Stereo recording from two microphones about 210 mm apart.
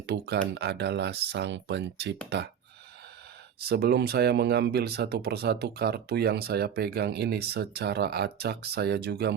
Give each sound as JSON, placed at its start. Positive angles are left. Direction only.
{"t": 0.1, "sound": "speech", "side_deg": -55}
{"t": 3.7, "sound": "speech", "side_deg": -50}